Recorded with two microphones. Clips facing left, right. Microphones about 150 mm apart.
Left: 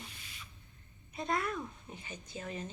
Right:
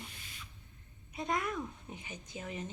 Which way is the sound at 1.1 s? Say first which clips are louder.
Even; 15° right (ahead or behind).